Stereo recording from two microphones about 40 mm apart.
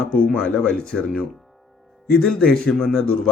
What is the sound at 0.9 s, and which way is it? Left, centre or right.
Speech, left.